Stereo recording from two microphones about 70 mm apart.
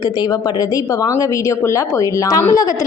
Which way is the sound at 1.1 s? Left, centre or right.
Left.